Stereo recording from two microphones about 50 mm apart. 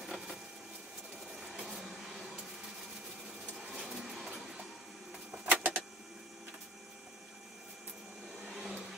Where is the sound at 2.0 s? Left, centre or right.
Centre.